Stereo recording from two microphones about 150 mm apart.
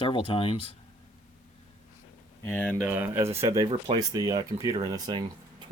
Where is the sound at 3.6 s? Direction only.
40° right (ahead or behind).